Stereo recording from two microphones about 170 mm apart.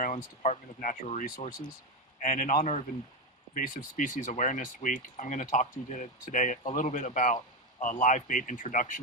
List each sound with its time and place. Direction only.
0.0 s speech: 45° left (ahead or behind)